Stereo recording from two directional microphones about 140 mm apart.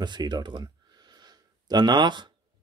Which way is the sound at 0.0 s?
30° right (ahead or behind).